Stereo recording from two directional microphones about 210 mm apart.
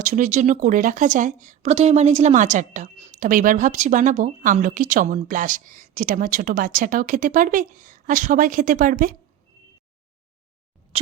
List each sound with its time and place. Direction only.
0.0 s speech: 40° right (ahead or behind)
10.9 s speech: 30° right (ahead or behind)